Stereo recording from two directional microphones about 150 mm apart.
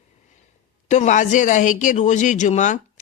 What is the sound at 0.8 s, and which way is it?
Speech, 55° left (ahead or behind).